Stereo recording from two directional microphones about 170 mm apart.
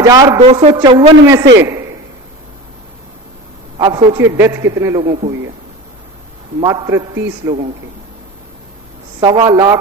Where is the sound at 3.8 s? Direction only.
30° right (ahead or behind).